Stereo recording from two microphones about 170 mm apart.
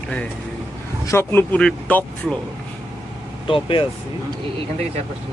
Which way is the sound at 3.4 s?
30° left (ahead or behind).